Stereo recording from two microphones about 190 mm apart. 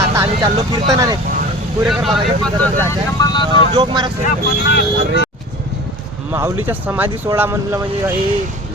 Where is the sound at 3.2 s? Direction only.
25° left (ahead or behind).